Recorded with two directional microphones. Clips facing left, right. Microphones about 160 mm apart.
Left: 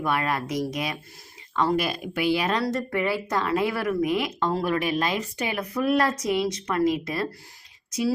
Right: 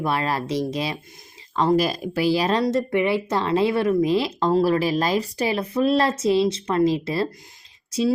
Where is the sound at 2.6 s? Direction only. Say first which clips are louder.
Right 5 dB; 20° right (ahead or behind).